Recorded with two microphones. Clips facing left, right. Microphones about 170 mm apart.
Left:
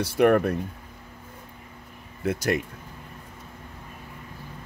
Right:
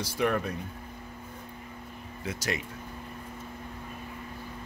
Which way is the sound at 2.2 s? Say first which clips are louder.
Left 9 dB; 55° left (ahead or behind).